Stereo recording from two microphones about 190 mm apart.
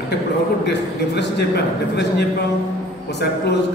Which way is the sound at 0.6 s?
65° left (ahead or behind).